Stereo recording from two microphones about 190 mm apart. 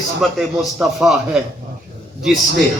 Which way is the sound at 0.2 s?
Centre (ahead or behind).